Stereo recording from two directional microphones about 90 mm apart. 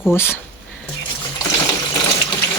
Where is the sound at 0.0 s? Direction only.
25° left (ahead or behind).